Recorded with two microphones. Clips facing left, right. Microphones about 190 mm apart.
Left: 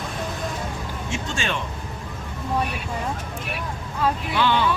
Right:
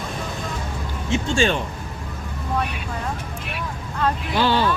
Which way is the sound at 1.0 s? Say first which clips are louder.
Right 9 dB; 25° right (ahead or behind).